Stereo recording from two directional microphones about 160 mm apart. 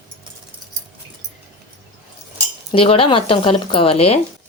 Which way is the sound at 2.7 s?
35° left (ahead or behind).